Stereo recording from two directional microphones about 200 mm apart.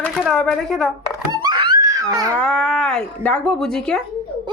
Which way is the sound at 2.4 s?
5° left (ahead or behind).